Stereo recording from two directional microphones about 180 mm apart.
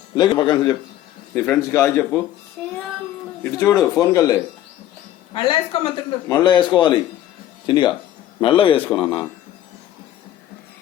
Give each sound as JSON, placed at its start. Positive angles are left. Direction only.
{"t": 0.2, "sound": "speech", "side_deg": 25}
{"t": 1.3, "sound": "a man's voice", "side_deg": 10}
{"t": 3.4, "sound": "a man's voice", "side_deg": 15}